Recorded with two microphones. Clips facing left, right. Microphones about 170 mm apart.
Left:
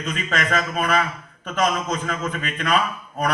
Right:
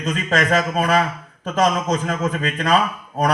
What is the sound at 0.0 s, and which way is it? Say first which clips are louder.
A man's voice: right 5 dB; 40° right (ahead or behind).